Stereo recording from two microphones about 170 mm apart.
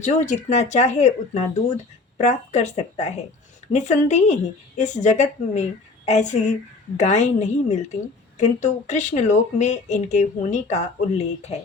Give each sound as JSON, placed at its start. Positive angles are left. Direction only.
{"t": 0.0, "sound": "speech", "side_deg": 45}